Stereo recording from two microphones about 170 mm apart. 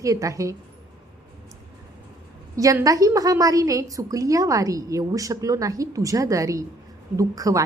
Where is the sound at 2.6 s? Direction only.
20° right (ahead or behind).